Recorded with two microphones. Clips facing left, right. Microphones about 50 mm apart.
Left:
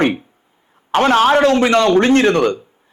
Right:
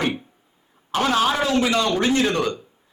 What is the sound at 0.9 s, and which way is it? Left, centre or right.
A man's voice, left.